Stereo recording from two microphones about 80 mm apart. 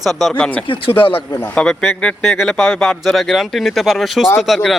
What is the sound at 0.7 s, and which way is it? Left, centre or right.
Speech, left.